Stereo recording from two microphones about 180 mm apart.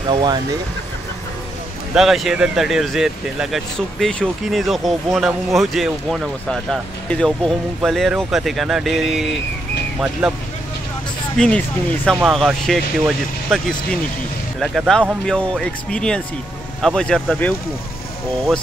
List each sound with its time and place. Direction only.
0.1 s speech: 25° right (ahead or behind)
2.0 s speech: centre (ahead or behind)
11.3 s speech: 5° left (ahead or behind)